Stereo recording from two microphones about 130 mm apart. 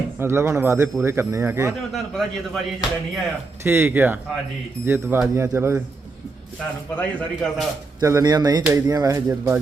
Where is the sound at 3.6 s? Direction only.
20° right (ahead or behind).